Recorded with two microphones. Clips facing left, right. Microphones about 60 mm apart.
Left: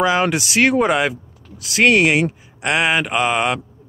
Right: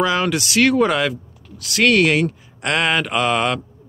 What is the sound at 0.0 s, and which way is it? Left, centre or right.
Speech, centre.